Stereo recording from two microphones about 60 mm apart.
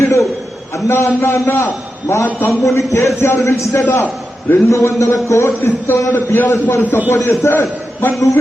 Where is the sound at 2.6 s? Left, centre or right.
Left.